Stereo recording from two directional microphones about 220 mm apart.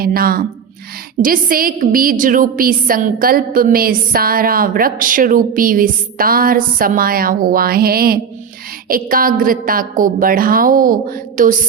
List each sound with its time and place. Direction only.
0.0 s a woman's voice: 40° right (ahead or behind)